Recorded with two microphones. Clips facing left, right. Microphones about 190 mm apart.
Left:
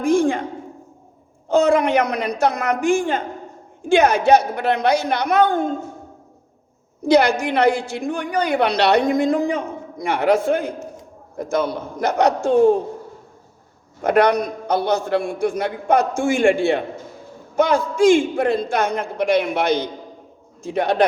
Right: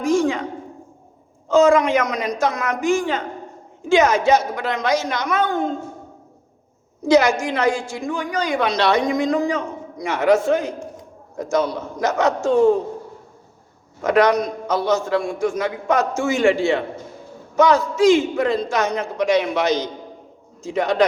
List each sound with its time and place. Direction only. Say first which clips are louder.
0.0 s a sound: left 1 dB; 55° left (ahead or behind)
1.5 s a woman's voice: right 1 dB; 60° left (ahead or behind)
7.0 s a woman's voice: even; 60° left (ahead or behind)
14.0 s a woman's voice: even; 60° left (ahead or behind)